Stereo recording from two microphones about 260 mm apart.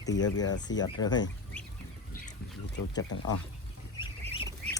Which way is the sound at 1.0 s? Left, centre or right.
Centre.